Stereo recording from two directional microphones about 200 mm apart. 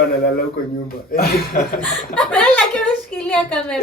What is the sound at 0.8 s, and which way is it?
Speech, 50° left (ahead or behind).